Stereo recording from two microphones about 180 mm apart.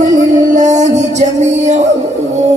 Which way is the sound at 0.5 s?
40° right (ahead or behind).